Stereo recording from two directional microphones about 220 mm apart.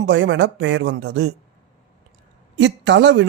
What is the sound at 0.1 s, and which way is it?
Speech, 55° right (ahead or behind).